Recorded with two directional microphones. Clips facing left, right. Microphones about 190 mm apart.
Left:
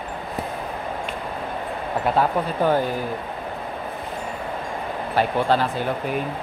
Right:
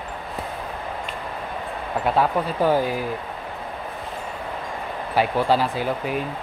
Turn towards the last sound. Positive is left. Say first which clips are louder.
# even
turn(degrees=-5)  # may be behind; listen again after turning